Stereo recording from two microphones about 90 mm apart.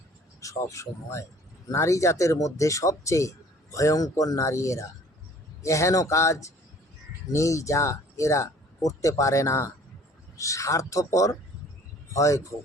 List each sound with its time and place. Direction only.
0.3 s speech: 35° left (ahead or behind)